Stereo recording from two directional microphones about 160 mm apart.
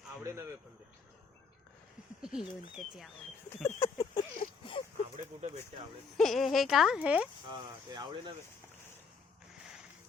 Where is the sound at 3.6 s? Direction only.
20° left (ahead or behind).